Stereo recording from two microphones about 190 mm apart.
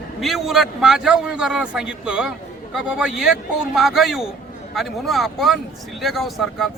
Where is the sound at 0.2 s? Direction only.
Centre (ahead or behind).